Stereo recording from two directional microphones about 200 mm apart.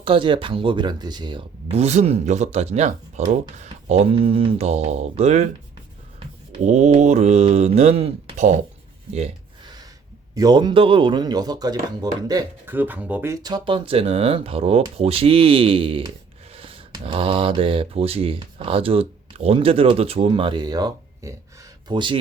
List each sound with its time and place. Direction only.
0.0 s speech: 25° right (ahead or behind)
6.1 s mantra: 35° right (ahead or behind)
9.1 s a sound: 30° right (ahead or behind)
10.3 s speech: 20° right (ahead or behind)